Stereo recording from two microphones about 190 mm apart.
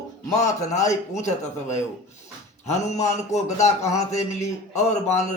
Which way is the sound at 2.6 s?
35° left (ahead or behind).